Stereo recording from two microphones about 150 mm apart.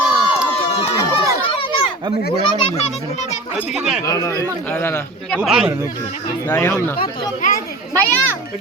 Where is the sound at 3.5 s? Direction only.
Centre (ahead or behind).